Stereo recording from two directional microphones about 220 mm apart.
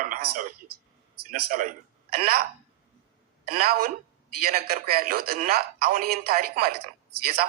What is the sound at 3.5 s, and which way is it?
Speech, 40° right (ahead or behind).